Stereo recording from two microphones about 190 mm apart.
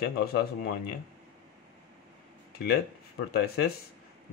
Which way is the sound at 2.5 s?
55° left (ahead or behind).